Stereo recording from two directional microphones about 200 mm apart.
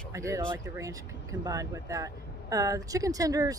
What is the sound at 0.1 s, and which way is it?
Speech, 15° right (ahead or behind).